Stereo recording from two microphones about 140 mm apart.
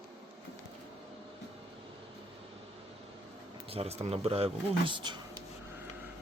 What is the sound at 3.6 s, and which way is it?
Speech, 45° right (ahead or behind).